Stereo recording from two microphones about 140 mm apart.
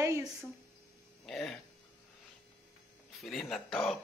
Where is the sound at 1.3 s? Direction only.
Centre (ahead or behind).